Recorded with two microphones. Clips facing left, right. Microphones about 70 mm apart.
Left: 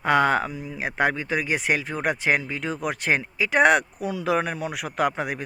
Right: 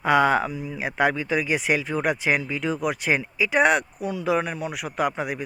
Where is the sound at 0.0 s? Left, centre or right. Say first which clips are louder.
Right 1 dB; left.